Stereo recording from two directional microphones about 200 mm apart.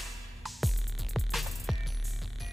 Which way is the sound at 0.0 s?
Centre (ahead or behind).